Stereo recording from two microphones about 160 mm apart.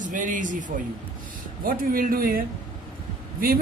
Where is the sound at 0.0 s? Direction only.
55° right (ahead or behind).